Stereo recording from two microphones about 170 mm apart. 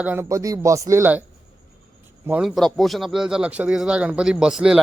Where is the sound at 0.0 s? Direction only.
10° right (ahead or behind).